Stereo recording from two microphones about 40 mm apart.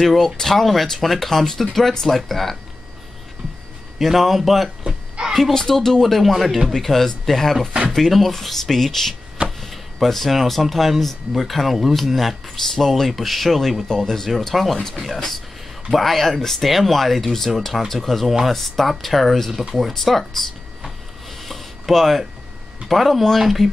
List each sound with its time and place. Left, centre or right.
0.0 s speech: centre
4.0 s speech: centre
4.8 s a sound: centre
5.5 s speech: centre
21.3 s a sound: centre
22.8 s speech: centre